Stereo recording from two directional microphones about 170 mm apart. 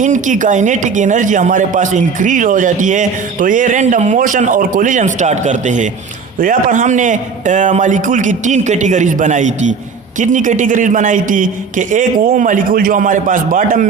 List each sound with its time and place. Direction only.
0.0 s speech: 50° right (ahead or behind)